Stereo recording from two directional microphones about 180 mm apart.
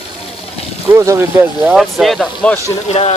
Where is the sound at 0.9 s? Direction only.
15° right (ahead or behind); by 2.6 s 5° left (ahead or behind).